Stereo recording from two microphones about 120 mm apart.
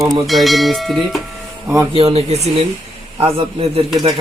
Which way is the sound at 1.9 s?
55° right (ahead or behind).